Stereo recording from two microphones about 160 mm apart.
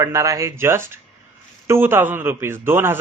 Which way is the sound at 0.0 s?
20° right (ahead or behind).